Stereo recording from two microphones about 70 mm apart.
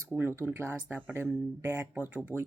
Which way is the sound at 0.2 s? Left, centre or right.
Right.